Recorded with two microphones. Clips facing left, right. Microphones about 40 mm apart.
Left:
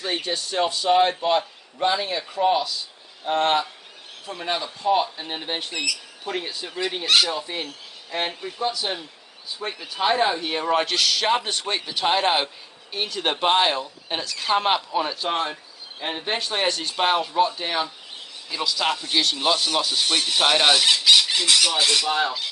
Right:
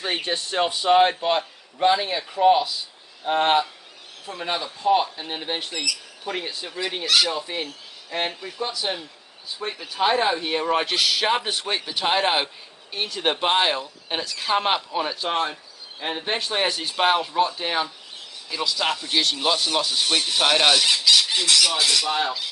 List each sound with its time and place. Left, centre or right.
0.0 s a man's voice: right; by 20.7 s centre
21.0 s speech: left